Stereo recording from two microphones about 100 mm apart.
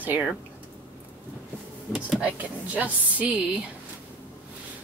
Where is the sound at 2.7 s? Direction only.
15° right (ahead or behind).